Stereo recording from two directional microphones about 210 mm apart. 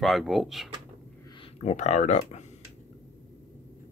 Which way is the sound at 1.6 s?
35° left (ahead or behind).